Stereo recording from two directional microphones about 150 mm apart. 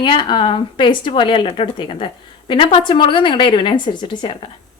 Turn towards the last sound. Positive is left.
turn(degrees=30)  # may be behind; listen again after turning